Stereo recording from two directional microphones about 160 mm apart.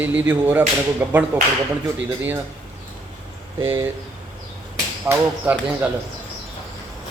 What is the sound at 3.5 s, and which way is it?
Speech, 15° right (ahead or behind).